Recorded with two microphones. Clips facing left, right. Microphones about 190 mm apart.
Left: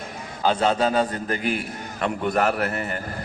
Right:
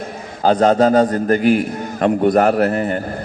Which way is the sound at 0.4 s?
40° right (ahead or behind).